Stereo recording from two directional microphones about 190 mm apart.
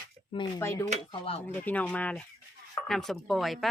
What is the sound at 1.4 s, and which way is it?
Speech, 10° left (ahead or behind).